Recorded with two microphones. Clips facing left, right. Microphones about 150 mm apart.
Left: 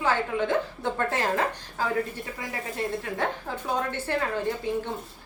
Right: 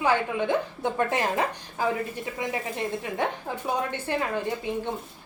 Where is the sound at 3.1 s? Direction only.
15° right (ahead or behind).